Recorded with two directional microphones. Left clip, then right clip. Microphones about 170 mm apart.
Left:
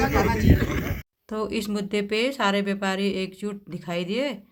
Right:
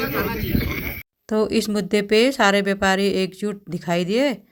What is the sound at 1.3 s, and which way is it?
Speech, 35° right (ahead or behind).